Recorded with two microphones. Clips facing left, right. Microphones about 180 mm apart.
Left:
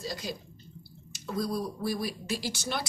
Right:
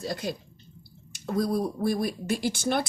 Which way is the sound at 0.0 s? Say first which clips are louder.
Right 5 dB; 55° right (ahead or behind).